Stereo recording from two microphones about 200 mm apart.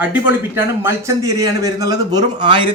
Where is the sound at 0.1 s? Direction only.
10° right (ahead or behind).